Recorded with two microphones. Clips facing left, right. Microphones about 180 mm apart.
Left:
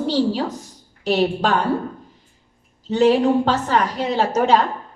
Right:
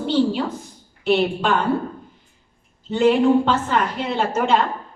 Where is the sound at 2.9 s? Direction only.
40° left (ahead or behind).